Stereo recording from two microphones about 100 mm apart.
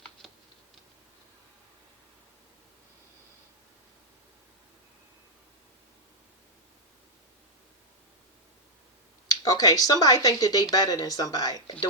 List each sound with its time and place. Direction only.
9.2 s speech: 35° left (ahead or behind)